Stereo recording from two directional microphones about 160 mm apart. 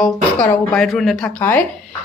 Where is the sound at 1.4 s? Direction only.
10° left (ahead or behind).